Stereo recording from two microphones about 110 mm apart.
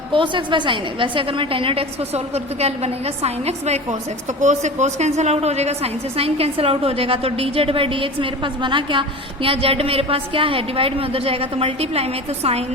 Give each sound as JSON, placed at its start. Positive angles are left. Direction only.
{"t": 0.1, "sound": "a woman's voice", "side_deg": -45}
{"t": 4.4, "sound": "a woman's voice", "side_deg": -90}